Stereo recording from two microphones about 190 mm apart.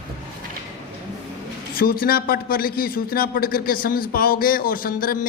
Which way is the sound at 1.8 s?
50° left (ahead or behind).